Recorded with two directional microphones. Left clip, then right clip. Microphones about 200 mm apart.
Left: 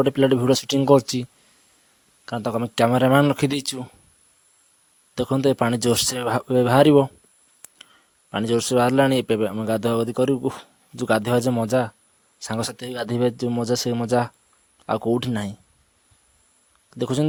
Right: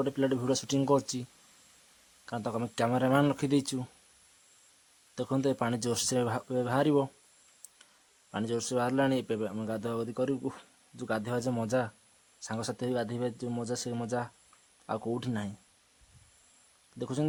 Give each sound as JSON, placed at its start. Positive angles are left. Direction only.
{"t": 0.0, "sound": "a man's voice", "side_deg": 35}
{"t": 5.1, "sound": "a man's voice", "side_deg": 35}
{"t": 8.3, "sound": "a man's voice", "side_deg": 35}
{"t": 17.0, "sound": "a man's voice", "side_deg": 35}